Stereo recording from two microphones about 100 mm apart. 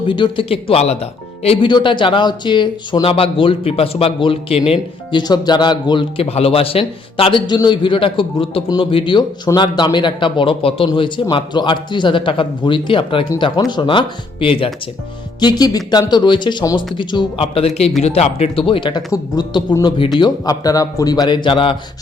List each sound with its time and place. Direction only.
0.1 s speech: 55° left (ahead or behind); by 0.9 s 85° left
1.6 s speech: 50° left (ahead or behind); by 4.8 s 75° left (ahead or behind)
5.1 s a man's voice: 45° left (ahead or behind)
6.1 s speech: 75° left (ahead or behind)
7.3 s speech: 45° left (ahead or behind)
13.6 s speech: 45° left (ahead or behind); by 14.7 s 65° left (ahead or behind)
15.4 s a man's voice: 45° left (ahead or behind); by 21.8 s 60° left (ahead or behind)